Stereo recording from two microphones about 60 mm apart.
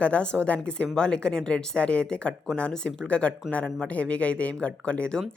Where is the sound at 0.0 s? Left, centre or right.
Centre.